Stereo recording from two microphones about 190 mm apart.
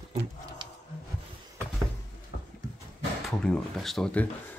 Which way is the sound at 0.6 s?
25° right (ahead or behind).